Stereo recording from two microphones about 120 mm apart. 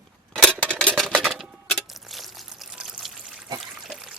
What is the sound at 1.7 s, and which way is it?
Pour, centre (ahead or behind).